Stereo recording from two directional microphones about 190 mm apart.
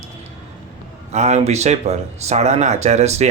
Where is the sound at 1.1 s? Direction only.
35° right (ahead or behind).